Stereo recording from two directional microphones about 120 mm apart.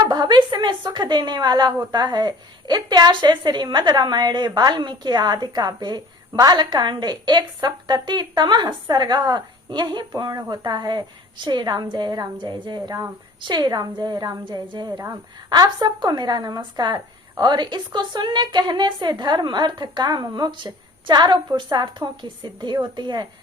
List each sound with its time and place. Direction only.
0.0 s a woman's voice: 35° right (ahead or behind)